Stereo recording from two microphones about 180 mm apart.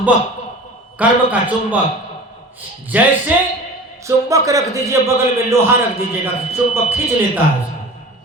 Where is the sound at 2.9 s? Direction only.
10° right (ahead or behind).